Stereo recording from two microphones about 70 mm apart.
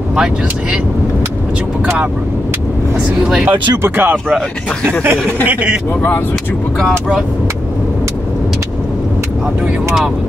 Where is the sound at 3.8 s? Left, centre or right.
Right.